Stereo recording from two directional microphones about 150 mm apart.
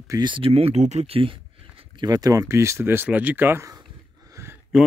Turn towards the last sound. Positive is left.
turn(degrees=-15)  # may be behind; listen again after turning